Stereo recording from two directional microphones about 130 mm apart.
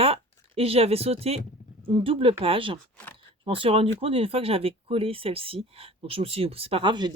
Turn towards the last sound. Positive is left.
turn(degrees=-35)  # may be behind; listen again after turning